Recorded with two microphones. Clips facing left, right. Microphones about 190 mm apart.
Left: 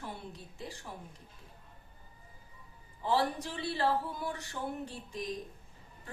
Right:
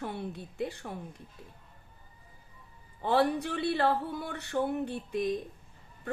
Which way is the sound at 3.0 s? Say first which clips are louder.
Right 5 dB; 60° right (ahead or behind).